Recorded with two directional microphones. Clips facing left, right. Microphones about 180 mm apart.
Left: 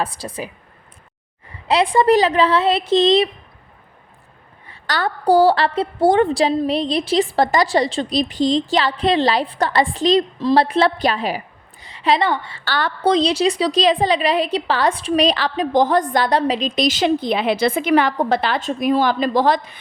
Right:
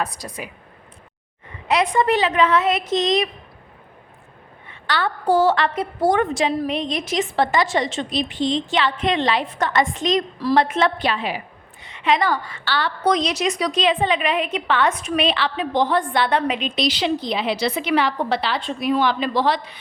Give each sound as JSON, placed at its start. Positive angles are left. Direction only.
{"t": 0.0, "sound": "a woman's voice", "side_deg": 30}
{"t": 4.7, "sound": "a woman's voice", "side_deg": 40}
{"t": 10.3, "sound": "a woman's voice", "side_deg": 20}
{"t": 10.6, "sound": "a woman's voice", "side_deg": 35}
{"t": 12.6, "sound": "a woman's voice", "side_deg": 45}
{"t": 13.0, "sound": "a woman's voice", "side_deg": 30}